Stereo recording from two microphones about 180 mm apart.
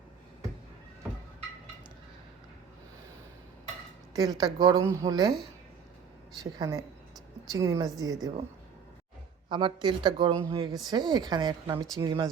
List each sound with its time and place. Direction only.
4.1 s speech: 20° right (ahead or behind)
6.4 s speech: 20° right (ahead or behind)
9.5 s speech: 25° right (ahead or behind)